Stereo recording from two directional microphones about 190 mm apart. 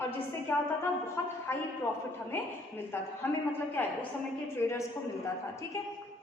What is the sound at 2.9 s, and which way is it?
A woman's voice, 10° left (ahead or behind).